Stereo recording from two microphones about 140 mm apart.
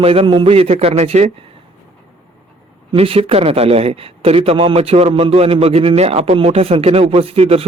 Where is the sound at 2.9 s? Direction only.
45° right (ahead or behind).